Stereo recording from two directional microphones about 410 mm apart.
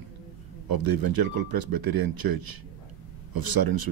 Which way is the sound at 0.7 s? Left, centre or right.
Right.